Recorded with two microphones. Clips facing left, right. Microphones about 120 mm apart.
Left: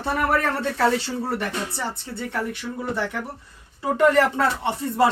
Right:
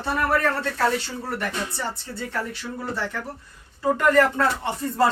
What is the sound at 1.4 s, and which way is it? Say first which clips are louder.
Speech: left 1 dB; 25° left (ahead or behind).